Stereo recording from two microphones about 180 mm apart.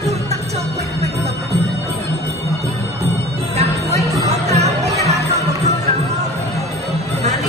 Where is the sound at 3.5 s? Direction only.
35° right (ahead or behind).